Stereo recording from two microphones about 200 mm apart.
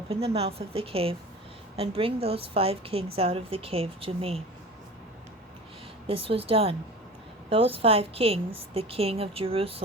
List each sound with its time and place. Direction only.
0.1 s a woman's voice: 30° right (ahead or behind)
6.1 s a woman's voice: 30° right (ahead or behind)